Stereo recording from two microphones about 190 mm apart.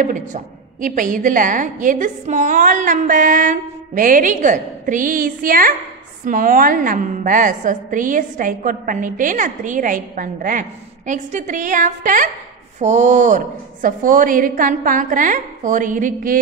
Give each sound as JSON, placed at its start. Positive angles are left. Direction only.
{"t": 0.0, "sound": "a woman's voice", "side_deg": -45}